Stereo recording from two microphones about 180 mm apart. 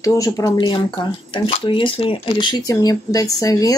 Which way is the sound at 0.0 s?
20° left (ahead or behind).